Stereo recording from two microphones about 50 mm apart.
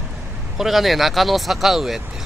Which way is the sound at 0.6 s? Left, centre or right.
Centre.